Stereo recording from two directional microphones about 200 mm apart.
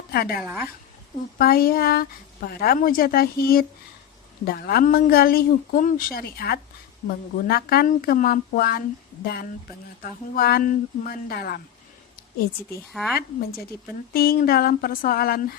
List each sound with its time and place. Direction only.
0.1 s a woman's voice: 50° left (ahead or behind)
12.9 s speech: centre (ahead or behind)
13.1 s a woman's voice: 50° left (ahead or behind)